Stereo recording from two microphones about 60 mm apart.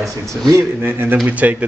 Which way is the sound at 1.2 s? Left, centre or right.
Right.